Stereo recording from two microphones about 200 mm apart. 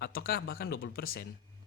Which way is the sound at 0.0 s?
50° left (ahead or behind).